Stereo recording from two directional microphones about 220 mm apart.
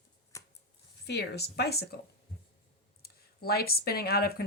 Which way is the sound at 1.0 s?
50° left (ahead or behind).